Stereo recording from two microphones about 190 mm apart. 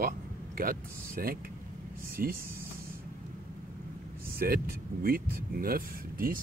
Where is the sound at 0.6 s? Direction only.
50° right (ahead or behind).